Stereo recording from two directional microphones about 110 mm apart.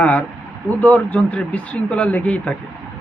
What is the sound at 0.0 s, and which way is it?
Speech, 15° left (ahead or behind).